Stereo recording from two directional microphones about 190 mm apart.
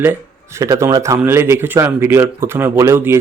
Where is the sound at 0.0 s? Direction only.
15° right (ahead or behind).